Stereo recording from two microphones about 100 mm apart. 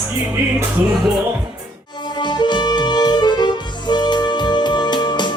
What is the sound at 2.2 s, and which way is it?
Music, 50° left (ahead or behind).